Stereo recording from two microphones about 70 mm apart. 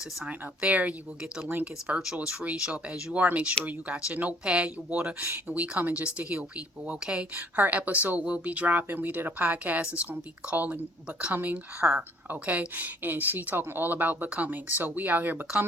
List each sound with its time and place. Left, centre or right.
0.3 s speech: right